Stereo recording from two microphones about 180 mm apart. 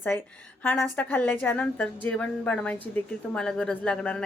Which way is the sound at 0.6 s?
10° left (ahead or behind).